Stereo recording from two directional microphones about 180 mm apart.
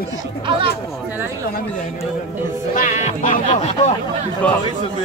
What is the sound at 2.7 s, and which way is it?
Speech, 45° left (ahead or behind).